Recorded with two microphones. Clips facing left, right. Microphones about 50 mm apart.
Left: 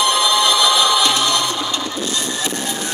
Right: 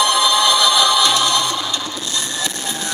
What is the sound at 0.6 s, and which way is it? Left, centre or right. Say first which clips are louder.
Music: even; left.